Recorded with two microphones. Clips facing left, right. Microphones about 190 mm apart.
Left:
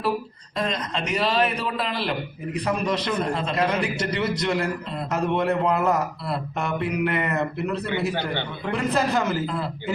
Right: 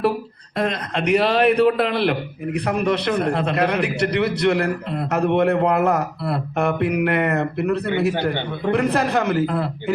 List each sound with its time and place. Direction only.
0.5 s a man's voice: 60° right (ahead or behind)